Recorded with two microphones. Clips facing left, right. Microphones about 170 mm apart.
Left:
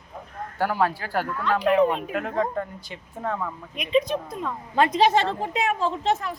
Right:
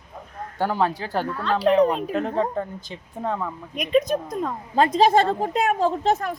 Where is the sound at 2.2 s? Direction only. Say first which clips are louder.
Right 1 dB; 30° right (ahead or behind).